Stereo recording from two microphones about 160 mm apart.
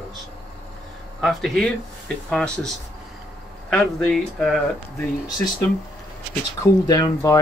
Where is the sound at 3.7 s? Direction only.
5° left (ahead or behind).